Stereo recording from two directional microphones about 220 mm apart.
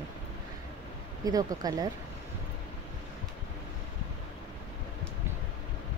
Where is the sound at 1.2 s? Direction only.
15° right (ahead or behind).